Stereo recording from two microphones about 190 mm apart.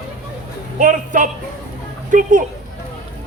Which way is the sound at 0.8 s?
45° right (ahead or behind).